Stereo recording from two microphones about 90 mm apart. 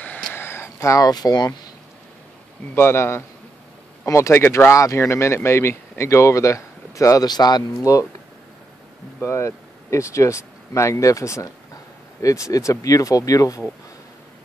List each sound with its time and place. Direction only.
0.0 s a sound: 20° left (ahead or behind); by 1.5 s 50° left (ahead or behind)
2.7 s a man's voice: 25° left (ahead or behind)
7.2 s speech: 50° left (ahead or behind)
9.2 s speech: 30° left (ahead or behind)